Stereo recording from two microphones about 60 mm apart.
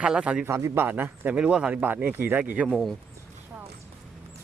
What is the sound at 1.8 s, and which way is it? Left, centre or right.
Speech, right.